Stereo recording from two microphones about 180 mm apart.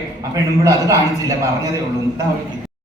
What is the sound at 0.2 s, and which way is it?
A man's voice, 15° right (ahead or behind).